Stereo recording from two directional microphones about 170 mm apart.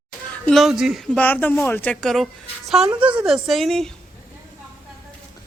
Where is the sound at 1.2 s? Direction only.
10° left (ahead or behind).